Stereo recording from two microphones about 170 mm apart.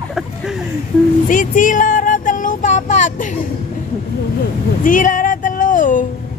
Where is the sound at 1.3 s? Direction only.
50° left (ahead or behind).